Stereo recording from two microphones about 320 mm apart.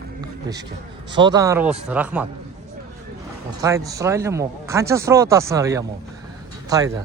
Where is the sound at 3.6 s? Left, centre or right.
Centre.